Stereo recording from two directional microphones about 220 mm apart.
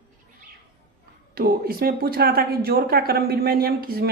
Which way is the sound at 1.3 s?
45° right (ahead or behind).